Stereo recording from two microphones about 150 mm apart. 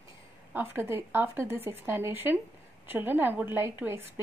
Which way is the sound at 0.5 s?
15° right (ahead or behind).